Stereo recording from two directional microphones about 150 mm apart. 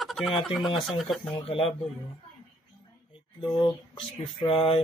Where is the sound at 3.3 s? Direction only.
30° left (ahead or behind).